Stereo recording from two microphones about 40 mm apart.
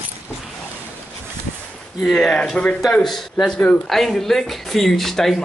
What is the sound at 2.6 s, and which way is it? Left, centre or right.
Speech, left.